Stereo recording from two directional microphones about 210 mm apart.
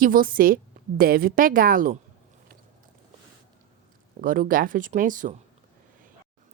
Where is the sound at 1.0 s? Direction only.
45° right (ahead or behind).